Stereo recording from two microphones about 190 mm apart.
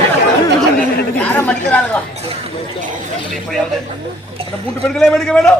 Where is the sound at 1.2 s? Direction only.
10° left (ahead or behind).